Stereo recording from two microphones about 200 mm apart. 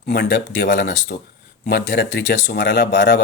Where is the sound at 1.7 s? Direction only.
55° left (ahead or behind).